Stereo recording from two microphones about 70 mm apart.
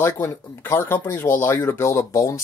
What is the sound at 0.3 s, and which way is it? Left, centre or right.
Speech, left.